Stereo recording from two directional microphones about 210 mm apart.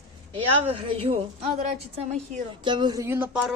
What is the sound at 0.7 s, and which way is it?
Speech, 30° right (ahead or behind).